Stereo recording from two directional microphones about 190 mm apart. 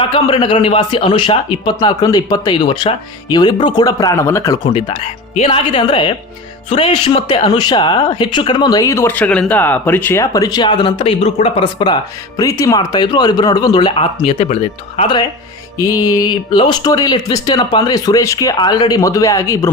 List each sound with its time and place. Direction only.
0.1 s speech: 25° left (ahead or behind)
4.7 s speech: 30° left (ahead or behind)
15.0 s speech: 20° left (ahead or behind)